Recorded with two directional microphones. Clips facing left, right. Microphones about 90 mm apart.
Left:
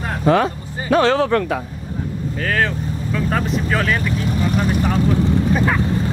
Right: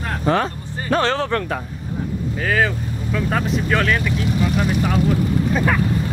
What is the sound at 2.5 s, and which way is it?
Speech, 5° right (ahead or behind).